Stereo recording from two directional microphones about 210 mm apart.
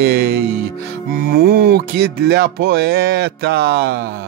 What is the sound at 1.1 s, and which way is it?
Speech, 45° right (ahead or behind).